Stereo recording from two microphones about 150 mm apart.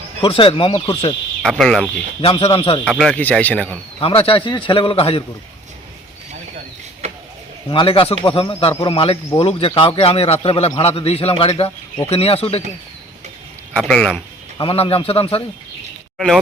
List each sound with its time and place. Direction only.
0.2 s speech: 35° left (ahead or behind)
1.4 s speech: 5° left (ahead or behind)
2.2 s speech: 40° left (ahead or behind)
2.8 s speech: 5° left (ahead or behind)
4.0 s speech: 40° left (ahead or behind)
7.0 s a sound: 45° right (ahead or behind)
7.7 s speech: 35° left (ahead or behind)
13.7 s speech: 5° left (ahead or behind)
14.6 s speech: 40° left (ahead or behind)
16.1 s speech: centre (ahead or behind)